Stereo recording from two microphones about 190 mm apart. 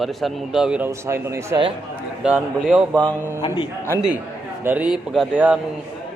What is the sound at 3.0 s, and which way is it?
Speech, 20° right (ahead or behind).